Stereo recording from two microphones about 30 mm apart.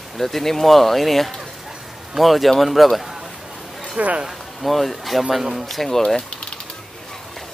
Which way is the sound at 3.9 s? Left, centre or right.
Right.